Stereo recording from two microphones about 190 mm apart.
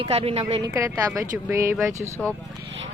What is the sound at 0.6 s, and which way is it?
Speech, 15° right (ahead or behind).